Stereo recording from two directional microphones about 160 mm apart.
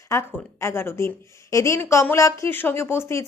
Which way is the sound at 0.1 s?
15° left (ahead or behind).